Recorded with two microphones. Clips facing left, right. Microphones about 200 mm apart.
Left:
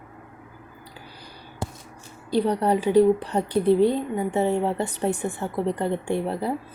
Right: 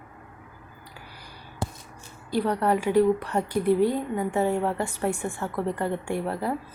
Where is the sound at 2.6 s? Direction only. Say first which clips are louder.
Left 3 dB; 30° left (ahead or behind).